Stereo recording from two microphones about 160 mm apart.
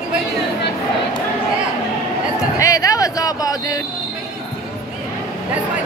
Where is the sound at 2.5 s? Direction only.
20° left (ahead or behind).